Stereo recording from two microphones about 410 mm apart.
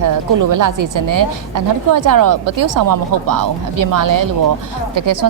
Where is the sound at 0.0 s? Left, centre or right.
Right.